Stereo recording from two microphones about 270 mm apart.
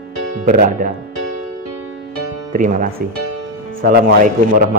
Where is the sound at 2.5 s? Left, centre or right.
Right.